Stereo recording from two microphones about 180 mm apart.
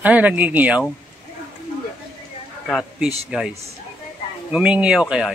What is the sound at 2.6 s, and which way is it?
A man's voice, 5° left (ahead or behind).